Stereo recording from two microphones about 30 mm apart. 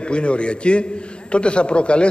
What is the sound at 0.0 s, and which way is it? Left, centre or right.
A man's voice, left.